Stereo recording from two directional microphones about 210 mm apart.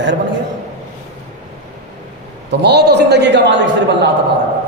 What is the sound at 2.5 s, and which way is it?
A man's voice, 55° right (ahead or behind).